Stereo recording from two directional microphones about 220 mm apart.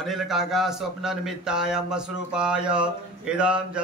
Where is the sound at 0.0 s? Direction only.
Centre (ahead or behind).